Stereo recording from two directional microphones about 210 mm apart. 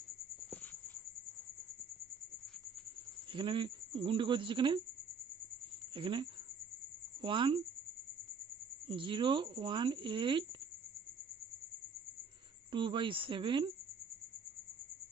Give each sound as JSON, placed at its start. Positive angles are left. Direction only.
{"t": 0.5, "sound": "a sound", "side_deg": 10}
{"t": 3.3, "sound": "speech", "side_deg": -25}
{"t": 5.9, "sound": "speech", "side_deg": -25}
{"t": 8.9, "sound": "speech", "side_deg": -25}
{"t": 12.7, "sound": "speech", "side_deg": -25}